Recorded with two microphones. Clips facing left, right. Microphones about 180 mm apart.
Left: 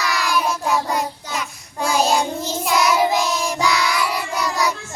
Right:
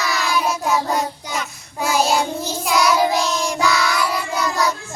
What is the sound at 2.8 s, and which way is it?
Child singing, 20° left (ahead or behind).